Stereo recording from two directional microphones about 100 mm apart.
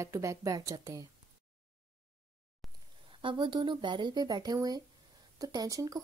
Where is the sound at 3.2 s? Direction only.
50° right (ahead or behind).